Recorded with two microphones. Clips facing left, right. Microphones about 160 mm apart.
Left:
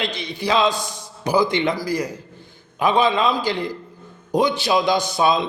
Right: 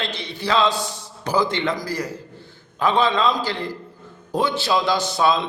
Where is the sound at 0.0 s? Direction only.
15° left (ahead or behind).